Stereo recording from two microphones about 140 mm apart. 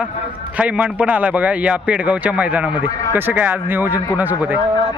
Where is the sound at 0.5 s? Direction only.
10° right (ahead or behind).